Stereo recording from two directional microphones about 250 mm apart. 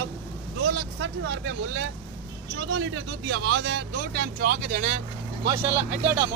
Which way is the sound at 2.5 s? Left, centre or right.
Right.